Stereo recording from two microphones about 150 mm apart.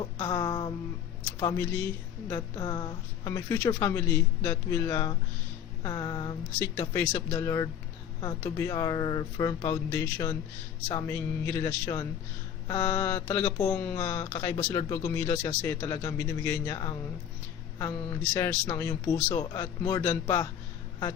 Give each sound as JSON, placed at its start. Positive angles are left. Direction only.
{"t": 0.2, "sound": "speech", "side_deg": 30}